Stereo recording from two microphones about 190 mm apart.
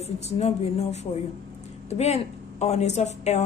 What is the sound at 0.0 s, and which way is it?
A woman's voice, 35° left (ahead or behind).